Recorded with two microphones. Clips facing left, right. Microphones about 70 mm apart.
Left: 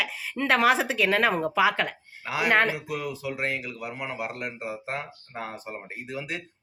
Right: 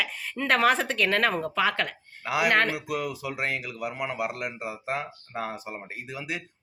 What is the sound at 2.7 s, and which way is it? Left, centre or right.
Speech, centre.